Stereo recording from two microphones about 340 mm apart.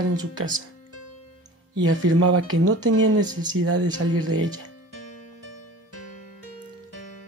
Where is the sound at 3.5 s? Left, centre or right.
Right.